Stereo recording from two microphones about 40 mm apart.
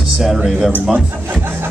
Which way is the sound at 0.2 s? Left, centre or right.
Centre.